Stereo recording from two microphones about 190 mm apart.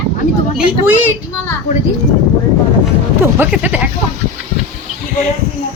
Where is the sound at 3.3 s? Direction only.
10° right (ahead or behind).